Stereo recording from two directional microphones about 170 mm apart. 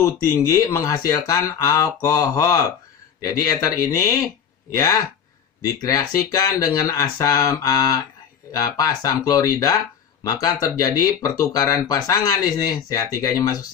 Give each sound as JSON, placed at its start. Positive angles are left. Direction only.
{"t": 0.7, "sound": "speech", "side_deg": 20}